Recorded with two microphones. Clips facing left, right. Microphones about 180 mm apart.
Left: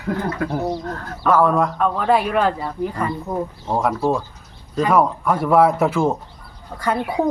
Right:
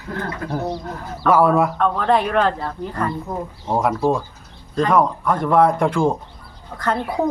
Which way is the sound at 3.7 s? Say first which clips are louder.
Right 1 dB; centre (ahead or behind).